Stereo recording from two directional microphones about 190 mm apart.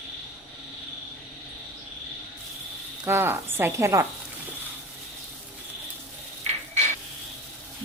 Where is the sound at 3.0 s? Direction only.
10° right (ahead or behind).